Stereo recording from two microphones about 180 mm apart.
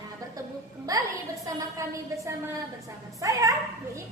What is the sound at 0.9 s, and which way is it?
A woman's voice, 20° right (ahead or behind).